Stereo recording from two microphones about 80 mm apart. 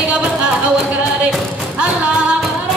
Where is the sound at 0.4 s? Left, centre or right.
Centre.